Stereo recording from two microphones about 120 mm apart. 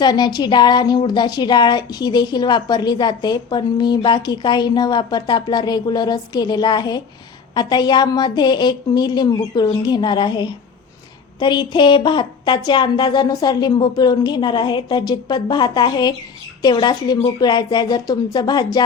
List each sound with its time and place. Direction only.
0.0 s speech: 35° left (ahead or behind)